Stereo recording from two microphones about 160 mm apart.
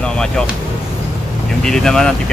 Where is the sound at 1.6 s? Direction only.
5° left (ahead or behind).